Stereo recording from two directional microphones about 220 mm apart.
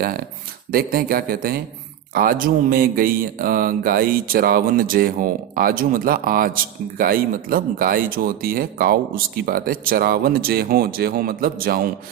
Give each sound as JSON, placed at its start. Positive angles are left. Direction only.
{"t": 0.0, "sound": "speech", "side_deg": -40}